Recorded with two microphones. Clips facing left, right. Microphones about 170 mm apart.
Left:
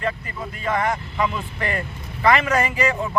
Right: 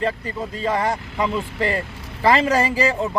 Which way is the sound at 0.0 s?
30° right (ahead or behind).